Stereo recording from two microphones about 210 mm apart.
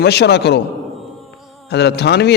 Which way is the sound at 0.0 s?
50° left (ahead or behind).